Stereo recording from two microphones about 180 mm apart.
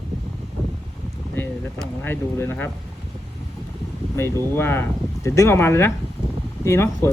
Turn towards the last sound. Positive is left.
turn(degrees=15)  # may be behind; listen again after turning